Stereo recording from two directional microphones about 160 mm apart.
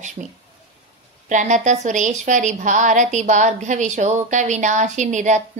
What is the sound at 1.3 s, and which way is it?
A woman's voice, 50° right (ahead or behind).